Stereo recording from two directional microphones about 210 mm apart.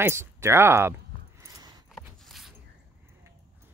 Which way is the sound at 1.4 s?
20° right (ahead or behind).